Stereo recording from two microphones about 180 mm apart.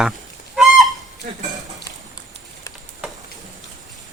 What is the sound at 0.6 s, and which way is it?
Goose, centre (ahead or behind).